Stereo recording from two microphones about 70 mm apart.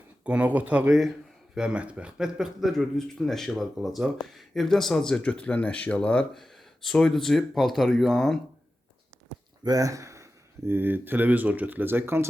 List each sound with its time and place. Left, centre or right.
0.3 s speech: right
0.9 s speech: centre
1.5 s speech: centre
6.3 s speech: centre
9.6 s speech: right
10.7 s speech: right